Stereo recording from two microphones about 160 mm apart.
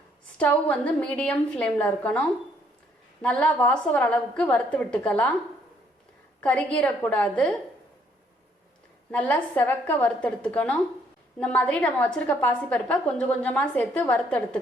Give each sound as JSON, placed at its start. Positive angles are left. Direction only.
{"t": 0.3, "sound": "a woman's voice", "side_deg": 10}
{"t": 6.4, "sound": "a woman's voice", "side_deg": 5}
{"t": 9.1, "sound": "a woman's voice", "side_deg": 10}